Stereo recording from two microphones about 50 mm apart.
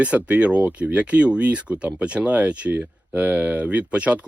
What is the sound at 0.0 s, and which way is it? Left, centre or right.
Speech, right.